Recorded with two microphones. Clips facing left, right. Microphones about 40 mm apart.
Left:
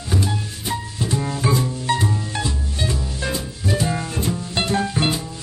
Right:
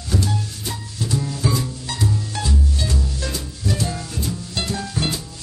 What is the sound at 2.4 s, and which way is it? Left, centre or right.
Music, left.